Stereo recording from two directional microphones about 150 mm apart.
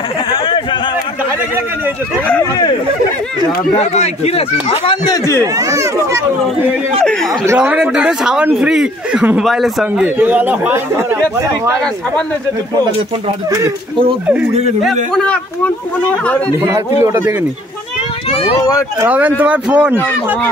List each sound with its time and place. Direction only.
3.9 s speech: 45° left (ahead or behind)
5.0 s speech: 20° left (ahead or behind)
5.4 s a child's voice: 25° right (ahead or behind)
7.5 s speech: 10° right (ahead or behind)
14.2 s speech: 10° right (ahead or behind)
15.1 s speech: 5° left (ahead or behind)
17.0 s speech: 15° right (ahead or behind)
18.3 s speech: 40° left (ahead or behind)
18.9 s speech: 10° right (ahead or behind)